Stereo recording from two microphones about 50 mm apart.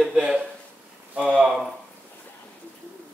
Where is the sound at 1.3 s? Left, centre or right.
Centre.